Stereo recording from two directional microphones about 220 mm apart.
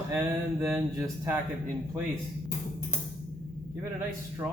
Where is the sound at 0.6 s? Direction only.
10° right (ahead or behind).